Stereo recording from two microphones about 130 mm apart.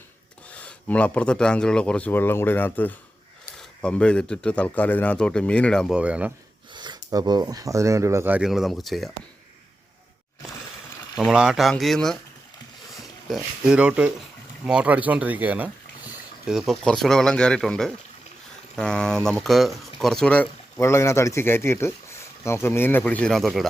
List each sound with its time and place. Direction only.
0.5 s speech: 10° left (ahead or behind)
5.9 s speech: 10° right (ahead or behind)
6.7 s speech: 35° right (ahead or behind)
8.4 s speech: 5° right (ahead or behind)
11.2 s speech: 5° right (ahead or behind)
20.7 s speech: 20° left (ahead or behind); by 23.6 s centre (ahead or behind)